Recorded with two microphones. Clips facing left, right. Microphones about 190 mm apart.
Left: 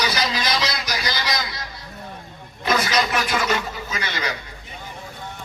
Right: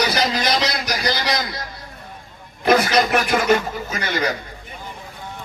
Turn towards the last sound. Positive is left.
turn(degrees=-50)  # may be behind; listen again after turning